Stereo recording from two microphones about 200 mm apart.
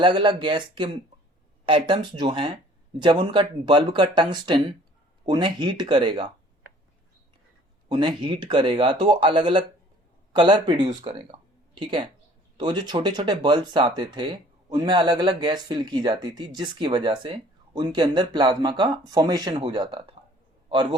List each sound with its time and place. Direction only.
0.0 s speech: 25° right (ahead or behind)
7.9 s speech: 25° right (ahead or behind)